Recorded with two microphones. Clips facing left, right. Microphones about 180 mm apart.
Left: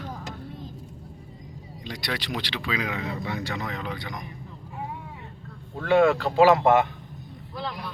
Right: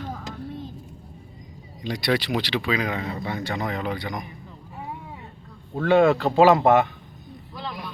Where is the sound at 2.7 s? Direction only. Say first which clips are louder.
Right 3 dB; 50° right (ahead or behind).